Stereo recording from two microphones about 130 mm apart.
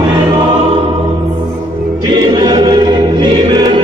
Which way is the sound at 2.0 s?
30° right (ahead or behind).